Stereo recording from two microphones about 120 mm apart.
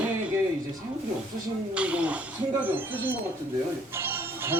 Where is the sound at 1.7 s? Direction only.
10° right (ahead or behind).